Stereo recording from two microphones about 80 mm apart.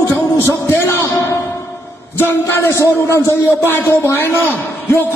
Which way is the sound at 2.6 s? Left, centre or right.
Left.